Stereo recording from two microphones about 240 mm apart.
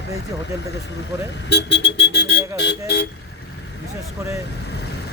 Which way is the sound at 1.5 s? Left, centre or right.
Left.